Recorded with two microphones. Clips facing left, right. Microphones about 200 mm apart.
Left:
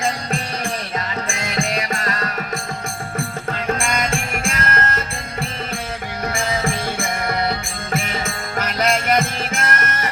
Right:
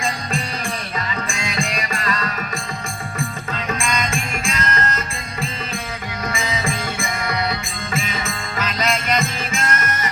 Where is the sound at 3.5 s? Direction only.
55° left (ahead or behind).